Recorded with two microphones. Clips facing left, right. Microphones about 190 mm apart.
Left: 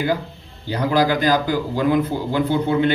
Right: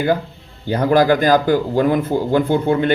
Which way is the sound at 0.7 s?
50° right (ahead or behind).